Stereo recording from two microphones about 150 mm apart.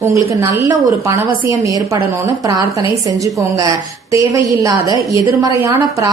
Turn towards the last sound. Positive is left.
turn(degrees=-20)  # may be behind; listen again after turning